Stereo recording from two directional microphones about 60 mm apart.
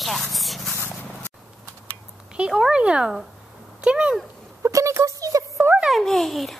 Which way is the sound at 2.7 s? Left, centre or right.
Centre.